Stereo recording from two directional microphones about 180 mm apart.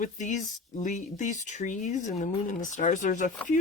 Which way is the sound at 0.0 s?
45° left (ahead or behind).